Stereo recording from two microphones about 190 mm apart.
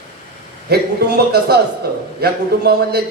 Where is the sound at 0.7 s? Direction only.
55° right (ahead or behind).